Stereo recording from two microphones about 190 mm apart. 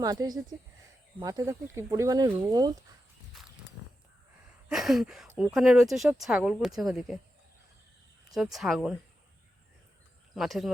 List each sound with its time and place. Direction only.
0.0 s speech: 20° right (ahead or behind)
3.3 s walk: centre (ahead or behind)
4.7 s a sound: centre (ahead or behind)
5.5 s speech: centre (ahead or behind)
8.5 s speech: centre (ahead or behind)
10.3 s speech: centre (ahead or behind)